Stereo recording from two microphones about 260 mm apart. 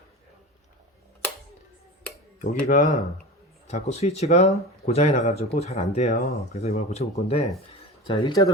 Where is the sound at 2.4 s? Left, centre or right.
Left.